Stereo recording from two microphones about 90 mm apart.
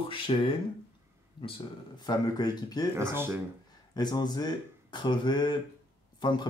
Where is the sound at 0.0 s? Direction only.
75° left (ahead or behind).